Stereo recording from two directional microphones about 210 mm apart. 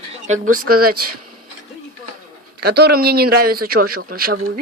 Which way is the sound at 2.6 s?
50° right (ahead or behind).